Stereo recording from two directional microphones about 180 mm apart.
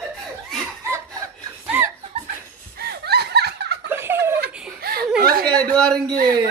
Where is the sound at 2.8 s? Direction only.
60° right (ahead or behind).